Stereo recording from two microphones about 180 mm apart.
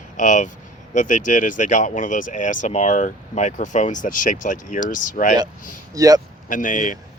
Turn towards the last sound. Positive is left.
turn(degrees=45)  # may be behind; listen again after turning